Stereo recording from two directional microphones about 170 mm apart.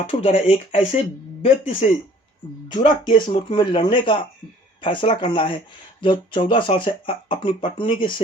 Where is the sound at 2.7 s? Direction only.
25° left (ahead or behind).